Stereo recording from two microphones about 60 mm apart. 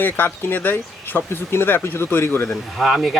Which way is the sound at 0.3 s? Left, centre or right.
Left.